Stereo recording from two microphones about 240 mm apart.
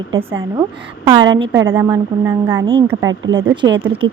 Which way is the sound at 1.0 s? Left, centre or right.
Centre.